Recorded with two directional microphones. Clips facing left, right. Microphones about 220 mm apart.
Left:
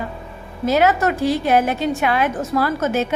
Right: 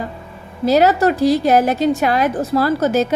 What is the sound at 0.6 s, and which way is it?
A woman's voice, 35° right (ahead or behind).